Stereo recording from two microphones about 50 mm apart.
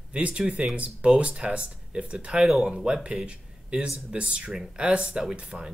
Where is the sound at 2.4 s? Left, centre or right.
Centre.